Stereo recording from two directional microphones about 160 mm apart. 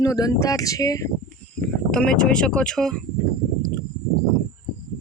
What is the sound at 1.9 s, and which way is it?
Speech, 5° left (ahead or behind).